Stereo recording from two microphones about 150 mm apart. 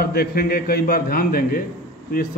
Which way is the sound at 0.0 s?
90° left.